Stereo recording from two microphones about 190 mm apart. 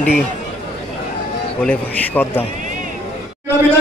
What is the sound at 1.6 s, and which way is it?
Speech, 10° left (ahead or behind).